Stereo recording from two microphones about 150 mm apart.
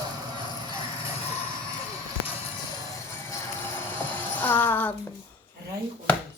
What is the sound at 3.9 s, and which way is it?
Music, 10° left (ahead or behind).